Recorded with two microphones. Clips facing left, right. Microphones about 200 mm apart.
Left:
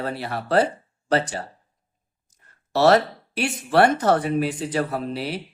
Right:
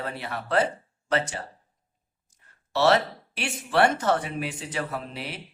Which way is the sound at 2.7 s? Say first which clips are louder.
Left 4 dB; 40° left (ahead or behind).